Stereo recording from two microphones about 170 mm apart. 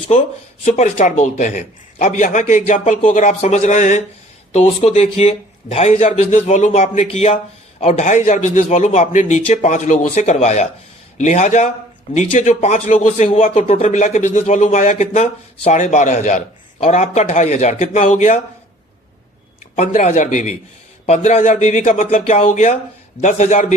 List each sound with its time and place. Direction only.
0.6 s a man's voice: 45° left (ahead or behind)
19.7 s a man's voice: 40° left (ahead or behind)